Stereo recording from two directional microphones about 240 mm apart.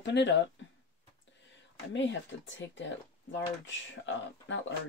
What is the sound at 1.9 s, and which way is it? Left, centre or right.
Speech, left.